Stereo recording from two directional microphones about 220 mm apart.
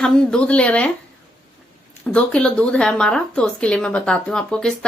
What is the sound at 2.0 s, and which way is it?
Speech, 5° left (ahead or behind).